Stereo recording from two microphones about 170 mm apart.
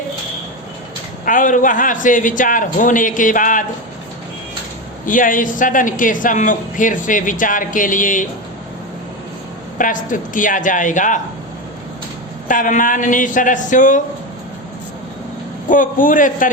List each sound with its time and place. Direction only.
1.2 s a man's voice: 50° left (ahead or behind)
5.0 s a man's voice: 50° left (ahead or behind)
9.7 s a man's voice: 50° left (ahead or behind)
12.5 s a man's voice: 50° left (ahead or behind)
15.7 s a man's voice: 50° left (ahead or behind)